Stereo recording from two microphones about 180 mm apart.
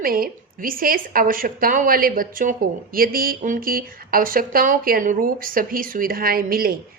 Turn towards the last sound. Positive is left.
turn(degrees=-55)  # may be behind; listen again after turning